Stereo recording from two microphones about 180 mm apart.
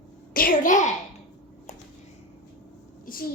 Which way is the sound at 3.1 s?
50° left (ahead or behind).